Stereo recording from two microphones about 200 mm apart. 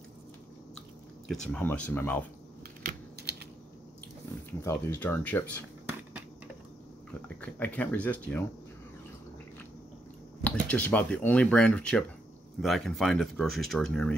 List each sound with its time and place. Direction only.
1.2 s speech: 5° left (ahead or behind)
2.8 s typing: 50° right (ahead or behind)
4.6 s speech: 15° left (ahead or behind)
7.2 s speech: 10° left (ahead or behind)
10.4 s speech: 5° left (ahead or behind)